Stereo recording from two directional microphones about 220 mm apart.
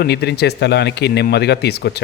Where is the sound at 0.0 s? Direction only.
50° left (ahead or behind).